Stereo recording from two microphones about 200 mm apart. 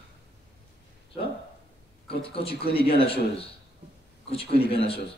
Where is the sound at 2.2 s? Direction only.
30° left (ahead or behind).